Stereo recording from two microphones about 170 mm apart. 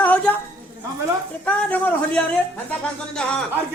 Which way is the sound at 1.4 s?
10° left (ahead or behind).